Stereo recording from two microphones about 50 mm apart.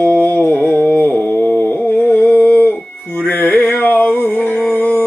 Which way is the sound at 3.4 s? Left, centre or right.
Left.